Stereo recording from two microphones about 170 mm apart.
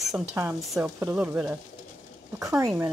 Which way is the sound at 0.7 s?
15° right (ahead or behind).